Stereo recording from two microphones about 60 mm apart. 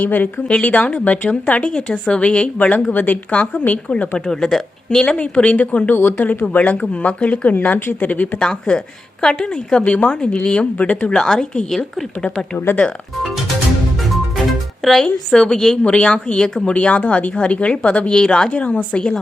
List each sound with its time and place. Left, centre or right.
0.0 s a woman's voice: left
4.3 s speech: centre
5.3 s speech: left
6.0 s a woman's voice: left
6.5 s a woman's voice: left
8.4 s speech: centre
11.2 s speech: centre
14.0 s music: centre
15.8 s speech: centre